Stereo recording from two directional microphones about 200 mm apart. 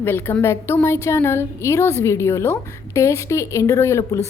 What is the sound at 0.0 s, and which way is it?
A woman's voice, 10° left (ahead or behind).